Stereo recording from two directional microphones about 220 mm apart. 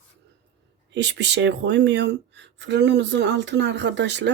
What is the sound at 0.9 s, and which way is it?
Speech, 55° right (ahead or behind).